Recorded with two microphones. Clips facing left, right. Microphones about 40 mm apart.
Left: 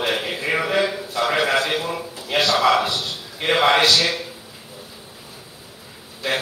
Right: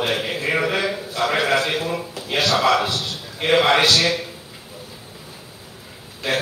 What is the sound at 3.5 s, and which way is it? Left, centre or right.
Speech, centre.